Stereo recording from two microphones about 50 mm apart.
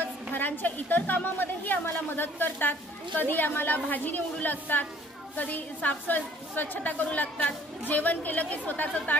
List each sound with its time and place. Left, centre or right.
0.0 s a woman's voice: left